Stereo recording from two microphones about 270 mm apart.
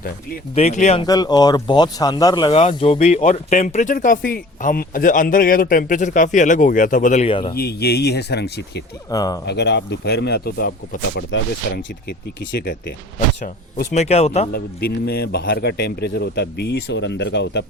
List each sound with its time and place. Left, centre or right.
0.5 s speech: left
1.0 s speech: centre
7.5 s speech: left
9.0 s speech: centre
9.5 s speech: left
13.1 s speech: left
15.0 s speech: left